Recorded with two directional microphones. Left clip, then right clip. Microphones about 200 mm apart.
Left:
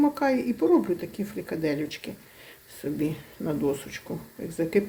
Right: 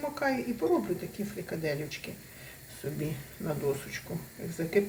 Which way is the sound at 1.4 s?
45° left (ahead or behind).